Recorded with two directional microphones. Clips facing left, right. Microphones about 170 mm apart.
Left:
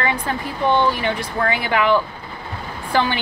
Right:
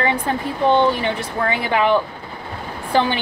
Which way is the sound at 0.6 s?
25° right (ahead or behind).